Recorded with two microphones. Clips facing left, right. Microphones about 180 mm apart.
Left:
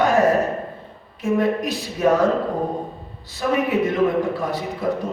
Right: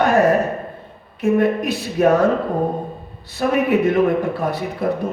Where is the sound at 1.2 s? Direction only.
60° right (ahead or behind).